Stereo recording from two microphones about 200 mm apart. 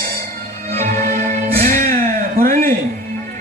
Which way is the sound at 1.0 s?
45° right (ahead or behind).